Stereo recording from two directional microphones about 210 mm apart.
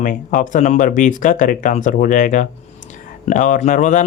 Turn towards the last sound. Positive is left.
turn(degrees=35)  # may be behind; listen again after turning